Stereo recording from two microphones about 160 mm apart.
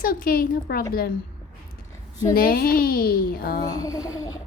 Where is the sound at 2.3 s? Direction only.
65° left (ahead or behind).